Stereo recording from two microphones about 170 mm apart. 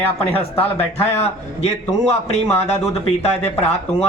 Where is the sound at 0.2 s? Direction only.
35° left (ahead or behind).